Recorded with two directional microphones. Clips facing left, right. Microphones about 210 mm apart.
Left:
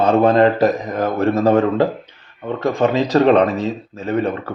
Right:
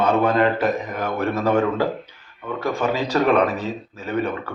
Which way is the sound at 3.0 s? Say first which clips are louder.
Left 4 dB; 35° left (ahead or behind).